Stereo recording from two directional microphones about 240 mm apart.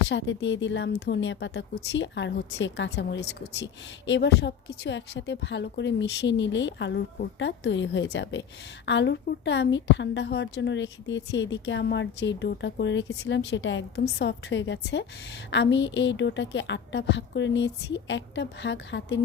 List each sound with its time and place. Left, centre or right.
0.1 s a woman's voice: left